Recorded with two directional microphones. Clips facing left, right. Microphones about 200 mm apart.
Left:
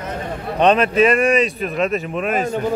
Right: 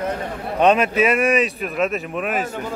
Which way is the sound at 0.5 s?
10° right (ahead or behind).